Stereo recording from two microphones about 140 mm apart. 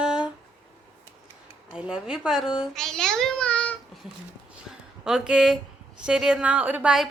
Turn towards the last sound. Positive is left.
turn(degrees=-5)  # may be behind; listen again after turning